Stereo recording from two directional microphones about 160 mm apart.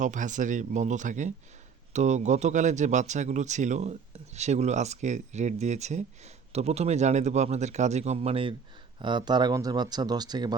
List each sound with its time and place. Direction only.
0.0 s speech: 50° right (ahead or behind); by 10.5 s 25° right (ahead or behind)